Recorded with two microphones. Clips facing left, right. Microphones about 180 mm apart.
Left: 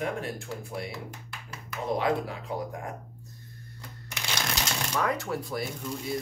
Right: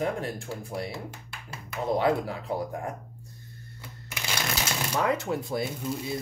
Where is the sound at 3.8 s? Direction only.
5° right (ahead or behind).